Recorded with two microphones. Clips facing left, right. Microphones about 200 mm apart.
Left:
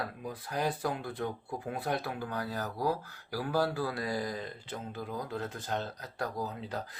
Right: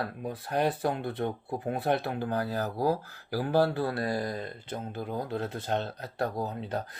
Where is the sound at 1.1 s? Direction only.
25° right (ahead or behind).